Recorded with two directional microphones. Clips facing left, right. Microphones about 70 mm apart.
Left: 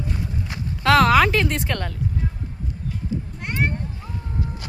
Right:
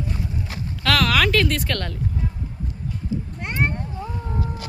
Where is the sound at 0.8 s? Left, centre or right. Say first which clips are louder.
Left 5 dB; left.